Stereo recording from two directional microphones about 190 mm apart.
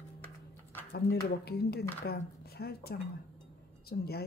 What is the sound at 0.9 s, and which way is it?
Speech, 55° left (ahead or behind).